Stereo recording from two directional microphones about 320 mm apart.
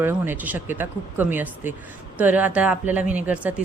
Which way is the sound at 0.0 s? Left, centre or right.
Centre.